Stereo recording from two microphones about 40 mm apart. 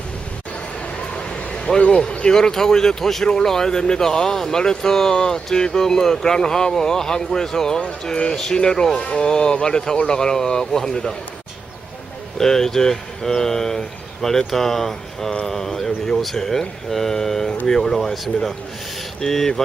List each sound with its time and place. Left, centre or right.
1.1 s a sound: left
2.0 s speech: left
12.4 s speech: centre